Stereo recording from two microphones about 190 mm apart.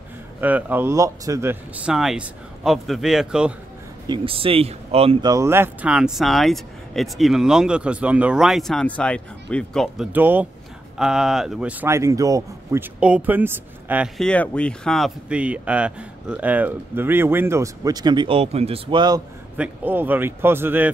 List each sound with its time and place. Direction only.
0.4 s speech: 10° right (ahead or behind)
4.1 s speech: 30° right (ahead or behind)
5.3 s speech: 15° right (ahead or behind); by 10.0 s 5° left (ahead or behind)
10.1 s speech: 10° right (ahead or behind)
19.5 s speech: 10° right (ahead or behind)